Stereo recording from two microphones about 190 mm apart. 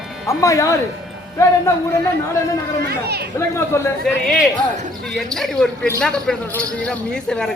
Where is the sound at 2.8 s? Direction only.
60° right (ahead or behind).